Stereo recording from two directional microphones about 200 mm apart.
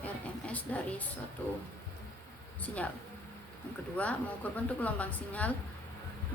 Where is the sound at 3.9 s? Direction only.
5° left (ahead or behind).